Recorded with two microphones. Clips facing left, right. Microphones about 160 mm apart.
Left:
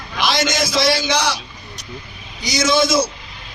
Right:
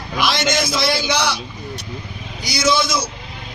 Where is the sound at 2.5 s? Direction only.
45° left (ahead or behind).